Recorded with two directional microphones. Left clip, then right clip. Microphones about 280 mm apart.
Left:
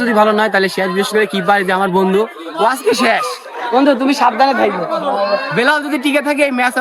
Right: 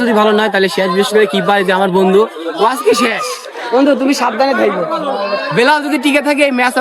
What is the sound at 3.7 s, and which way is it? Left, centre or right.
Speech, left.